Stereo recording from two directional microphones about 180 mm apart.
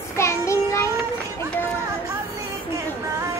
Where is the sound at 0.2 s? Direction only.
15° left (ahead or behind).